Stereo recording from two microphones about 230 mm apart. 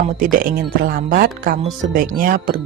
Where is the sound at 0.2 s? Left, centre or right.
Right.